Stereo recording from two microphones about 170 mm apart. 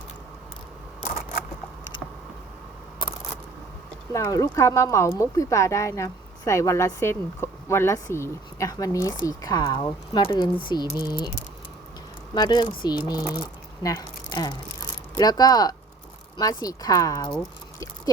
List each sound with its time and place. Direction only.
4.1 s speech: 20° left (ahead or behind)
12.3 s speech: 25° left (ahead or behind)